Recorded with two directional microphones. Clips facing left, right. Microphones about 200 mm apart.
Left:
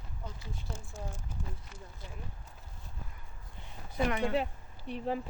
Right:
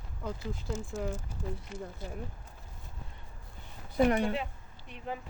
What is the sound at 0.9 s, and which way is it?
Speech, 85° right.